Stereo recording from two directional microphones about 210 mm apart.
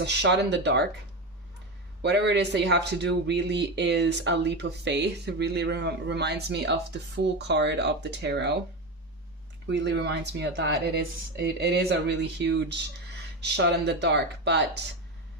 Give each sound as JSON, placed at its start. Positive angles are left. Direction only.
{"t": 0.0, "sound": "speech", "side_deg": -55}
{"t": 2.0, "sound": "speech", "side_deg": -55}
{"t": 9.6, "sound": "speech", "side_deg": -55}